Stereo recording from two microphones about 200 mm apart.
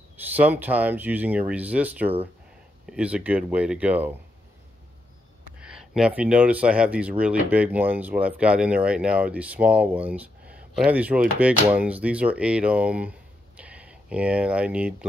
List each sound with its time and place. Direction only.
0.4 s speech: 10° right (ahead or behind)
5.6 s speech: 5° right (ahead or behind)